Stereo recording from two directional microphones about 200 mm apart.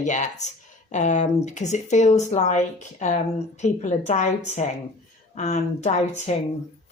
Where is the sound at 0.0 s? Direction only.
40° left (ahead or behind).